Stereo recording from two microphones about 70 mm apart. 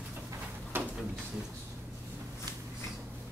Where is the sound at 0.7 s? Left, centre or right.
Right.